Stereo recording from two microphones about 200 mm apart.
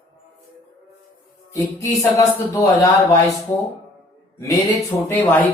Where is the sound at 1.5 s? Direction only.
15° left (ahead or behind).